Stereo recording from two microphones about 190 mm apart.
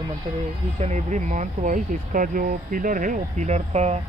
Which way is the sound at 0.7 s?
35° right (ahead or behind).